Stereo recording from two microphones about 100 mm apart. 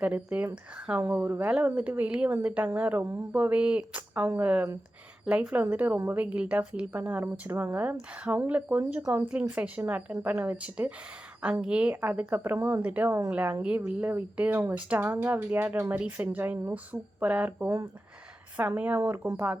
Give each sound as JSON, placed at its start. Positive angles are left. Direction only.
{"t": 0.0, "sound": "speech", "side_deg": -15}